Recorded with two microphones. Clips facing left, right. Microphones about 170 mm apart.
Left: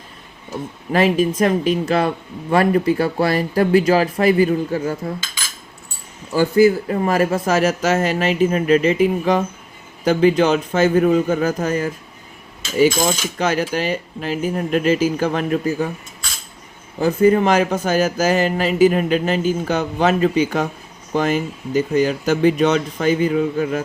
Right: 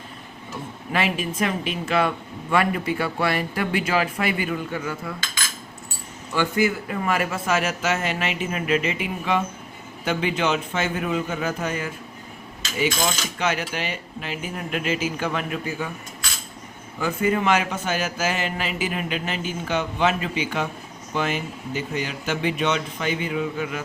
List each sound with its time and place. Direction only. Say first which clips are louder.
0.9 s speech: left 8 dB; 40° left (ahead or behind)
6.3 s speech: left 9 dB; 35° left (ahead or behind)
17.0 s speech: left 8 dB; 35° left (ahead or behind)